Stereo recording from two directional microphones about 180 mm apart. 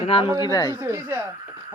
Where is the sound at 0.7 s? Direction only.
15° right (ahead or behind).